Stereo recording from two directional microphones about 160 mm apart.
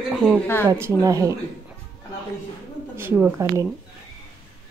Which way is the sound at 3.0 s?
15° right (ahead or behind).